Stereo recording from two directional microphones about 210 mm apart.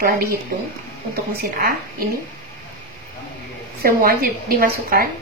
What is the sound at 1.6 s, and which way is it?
Speech, 45° right (ahead or behind).